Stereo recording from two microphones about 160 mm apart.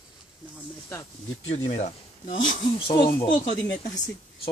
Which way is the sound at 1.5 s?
45° left (ahead or behind).